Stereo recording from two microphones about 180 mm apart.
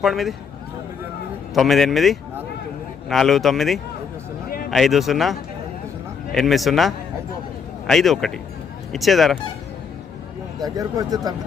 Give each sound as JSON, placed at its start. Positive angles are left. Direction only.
{"t": 0.0, "sound": "speech", "side_deg": 0}
{"t": 1.5, "sound": "speech", "side_deg": 0}
{"t": 4.4, "sound": "a sound", "side_deg": 55}
{"t": 4.7, "sound": "speech", "side_deg": 0}
{"t": 10.6, "sound": "speech", "side_deg": -20}